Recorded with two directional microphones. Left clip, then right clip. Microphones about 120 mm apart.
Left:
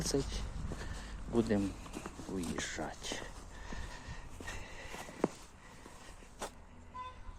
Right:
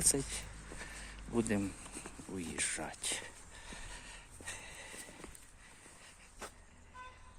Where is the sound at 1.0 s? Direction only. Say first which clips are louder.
Left 3 dB; 60° right (ahead or behind).